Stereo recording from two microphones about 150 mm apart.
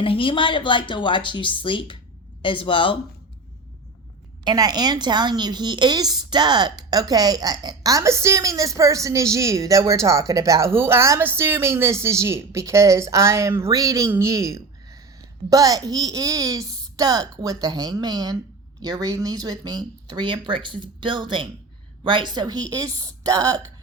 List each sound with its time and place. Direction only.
0.0 s speech: 35° left (ahead or behind)
4.4 s a woman's voice: 25° right (ahead or behind)